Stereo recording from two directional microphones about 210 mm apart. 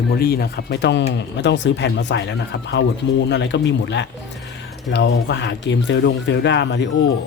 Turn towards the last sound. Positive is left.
turn(degrees=55)  # may be behind; listen again after turning